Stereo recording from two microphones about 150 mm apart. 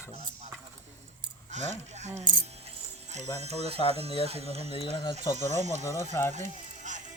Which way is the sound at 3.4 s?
45° right (ahead or behind).